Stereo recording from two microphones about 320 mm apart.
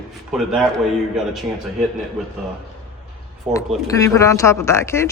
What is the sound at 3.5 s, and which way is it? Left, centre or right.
Speech, centre.